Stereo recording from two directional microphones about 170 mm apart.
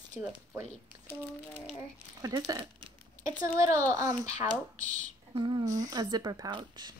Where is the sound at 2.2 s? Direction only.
20° right (ahead or behind).